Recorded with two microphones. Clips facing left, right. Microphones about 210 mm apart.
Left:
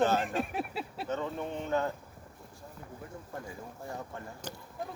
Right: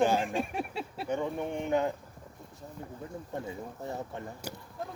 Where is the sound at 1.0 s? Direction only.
15° right (ahead or behind).